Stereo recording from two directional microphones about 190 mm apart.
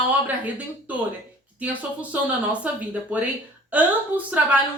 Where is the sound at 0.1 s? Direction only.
10° right (ahead or behind).